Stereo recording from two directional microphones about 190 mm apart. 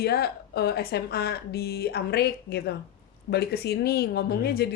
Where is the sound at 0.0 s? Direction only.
55° left (ahead or behind).